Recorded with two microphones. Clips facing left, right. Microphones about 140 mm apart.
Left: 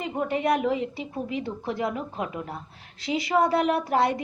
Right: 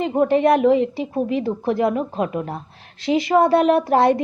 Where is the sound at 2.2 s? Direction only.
65° right (ahead or behind).